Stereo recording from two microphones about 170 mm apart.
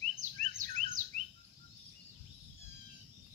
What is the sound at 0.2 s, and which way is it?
Bird vocalization, 45° right (ahead or behind).